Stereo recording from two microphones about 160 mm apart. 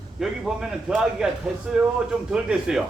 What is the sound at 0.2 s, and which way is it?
Speech, 5° right (ahead or behind).